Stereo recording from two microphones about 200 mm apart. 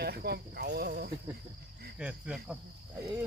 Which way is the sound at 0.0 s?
55° right (ahead or behind).